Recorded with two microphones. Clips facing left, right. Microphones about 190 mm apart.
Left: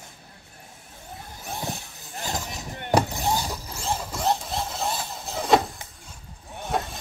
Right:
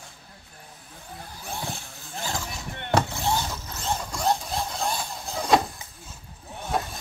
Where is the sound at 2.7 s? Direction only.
10° left (ahead or behind).